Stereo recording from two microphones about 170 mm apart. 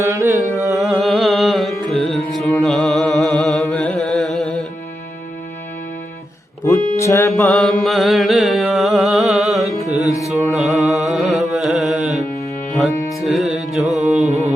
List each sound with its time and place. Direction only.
0.0 s carnatic music: 15° right (ahead or behind)
0.8 s music: centre (ahead or behind)
6.7 s music: 20° left (ahead or behind)
7.3 s mantra: centre (ahead or behind)
10.0 s music: 20° left (ahead or behind)
10.5 s music: centre (ahead or behind)
13.2 s music: centre (ahead or behind)
14.3 s a sound: 40° right (ahead or behind)